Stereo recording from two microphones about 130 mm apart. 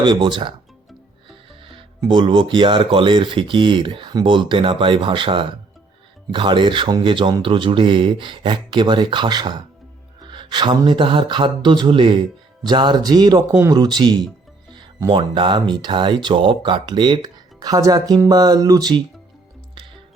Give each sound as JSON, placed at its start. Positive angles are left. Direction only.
{"t": 0.0, "sound": "speech", "side_deg": -35}
{"t": 2.0, "sound": "speech", "side_deg": -40}
{"t": 14.7, "sound": "music", "side_deg": -30}
{"t": 15.1, "sound": "speech", "side_deg": -40}